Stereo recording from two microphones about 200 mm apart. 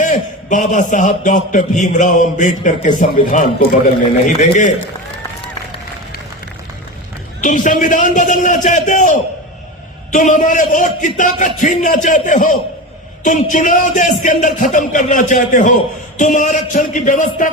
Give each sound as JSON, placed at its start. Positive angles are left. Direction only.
{"t": 0.0, "sound": "speech", "side_deg": 40}
{"t": 7.4, "sound": "speech", "side_deg": 40}